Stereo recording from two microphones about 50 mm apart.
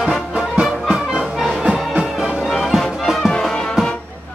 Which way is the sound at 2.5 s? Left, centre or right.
Centre.